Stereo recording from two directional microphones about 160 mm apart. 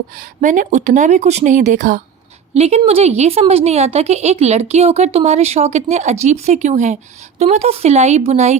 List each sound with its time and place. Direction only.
0.4 s a woman's voice: 50° right (ahead or behind)
2.6 s a woman's voice: 40° right (ahead or behind)